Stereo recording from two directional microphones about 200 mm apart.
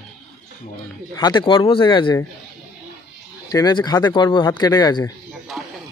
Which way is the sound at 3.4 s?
20° left (ahead or behind).